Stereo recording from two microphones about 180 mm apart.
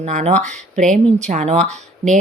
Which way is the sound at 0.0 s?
40° right (ahead or behind).